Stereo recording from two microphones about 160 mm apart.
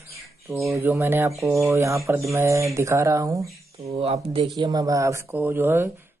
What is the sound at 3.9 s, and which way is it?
Speech, 40° right (ahead or behind).